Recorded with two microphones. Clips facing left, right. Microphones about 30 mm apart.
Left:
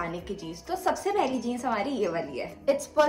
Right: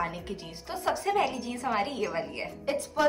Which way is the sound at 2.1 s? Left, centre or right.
Right.